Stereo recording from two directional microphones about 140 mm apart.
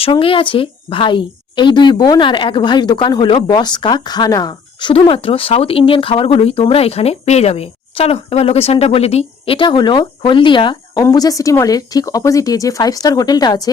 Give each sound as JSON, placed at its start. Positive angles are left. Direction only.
{"t": 0.0, "sound": "a woman's voice", "side_deg": 40}
{"t": 10.9, "sound": "speech", "side_deg": 25}